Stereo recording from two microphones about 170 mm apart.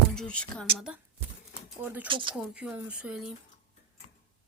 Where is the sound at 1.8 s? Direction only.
10° right (ahead or behind).